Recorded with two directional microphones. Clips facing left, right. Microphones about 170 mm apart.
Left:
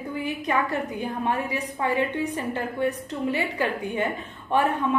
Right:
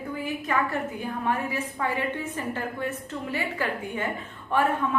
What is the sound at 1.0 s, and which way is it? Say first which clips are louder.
A woman's voice: left 1 dB; 20° left (ahead or behind).